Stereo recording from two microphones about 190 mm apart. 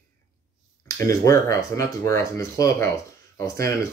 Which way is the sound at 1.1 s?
15° left (ahead or behind).